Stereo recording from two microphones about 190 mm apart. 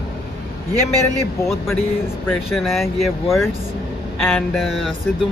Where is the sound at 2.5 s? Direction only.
Centre (ahead or behind).